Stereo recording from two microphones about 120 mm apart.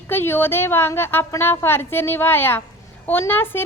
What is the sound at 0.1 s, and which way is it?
A woman's voice, 20° left (ahead or behind).